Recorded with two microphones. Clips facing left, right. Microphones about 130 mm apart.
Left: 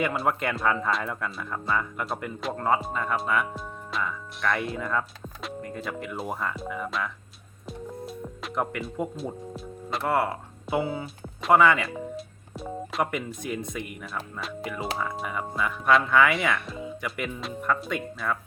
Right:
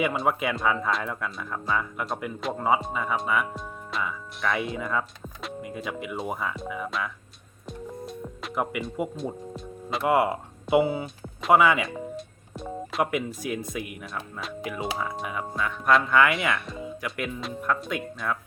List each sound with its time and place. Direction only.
0.0 s speech: centre (ahead or behind)
7.7 s music: centre (ahead or behind)
10.0 s speech: 15° right (ahead or behind)
10.9 s speech: centre (ahead or behind)